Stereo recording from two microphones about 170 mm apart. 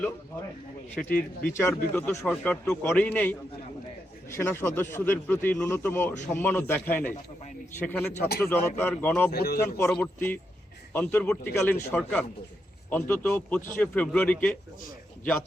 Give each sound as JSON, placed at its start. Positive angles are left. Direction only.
{"t": 1.5, "sound": "speech", "side_deg": 15}
{"t": 9.3, "sound": "speech", "side_deg": 65}
{"t": 9.7, "sound": "a man's voice", "side_deg": 10}